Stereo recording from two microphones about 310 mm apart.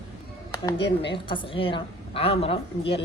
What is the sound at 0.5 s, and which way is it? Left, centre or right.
Music, centre.